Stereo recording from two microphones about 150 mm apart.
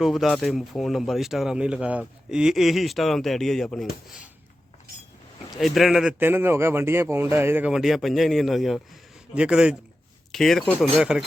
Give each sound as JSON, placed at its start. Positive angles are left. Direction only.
{"t": 0.0, "sound": "speech", "side_deg": 0}
{"t": 5.5, "sound": "speech", "side_deg": 0}